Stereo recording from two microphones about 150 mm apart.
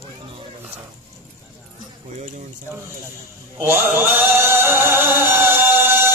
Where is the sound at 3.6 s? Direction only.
15° right (ahead or behind).